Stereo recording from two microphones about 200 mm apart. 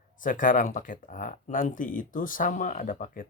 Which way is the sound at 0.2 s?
40° left (ahead or behind).